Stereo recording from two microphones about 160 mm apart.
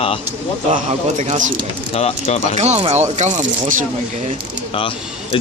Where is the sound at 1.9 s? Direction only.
40° left (ahead or behind).